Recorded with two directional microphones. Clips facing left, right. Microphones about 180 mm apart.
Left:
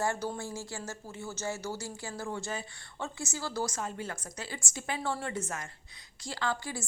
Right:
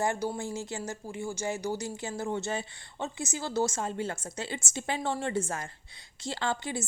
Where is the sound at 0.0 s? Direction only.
15° right (ahead or behind).